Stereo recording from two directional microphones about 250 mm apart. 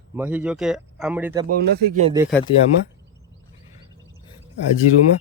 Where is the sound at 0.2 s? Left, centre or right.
Centre.